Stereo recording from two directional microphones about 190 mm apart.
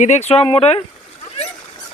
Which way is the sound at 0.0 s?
35° left (ahead or behind).